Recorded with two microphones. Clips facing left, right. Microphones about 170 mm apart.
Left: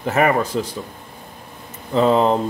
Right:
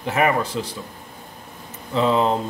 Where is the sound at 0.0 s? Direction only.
45° left (ahead or behind).